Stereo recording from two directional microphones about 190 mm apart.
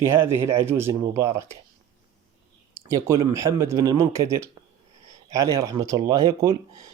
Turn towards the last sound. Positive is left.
turn(degrees=-15)  # may be behind; listen again after turning